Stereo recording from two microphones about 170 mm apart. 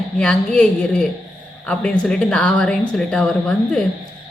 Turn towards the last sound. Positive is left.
turn(degrees=5)  # may be behind; listen again after turning